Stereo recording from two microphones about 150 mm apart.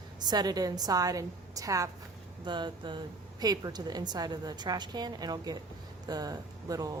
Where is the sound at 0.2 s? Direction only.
25° right (ahead or behind).